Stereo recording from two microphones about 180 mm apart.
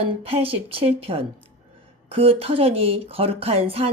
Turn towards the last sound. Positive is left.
turn(degrees=-35)  # may be behind; listen again after turning